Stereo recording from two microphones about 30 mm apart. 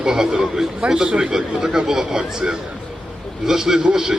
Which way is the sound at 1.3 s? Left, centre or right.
Centre.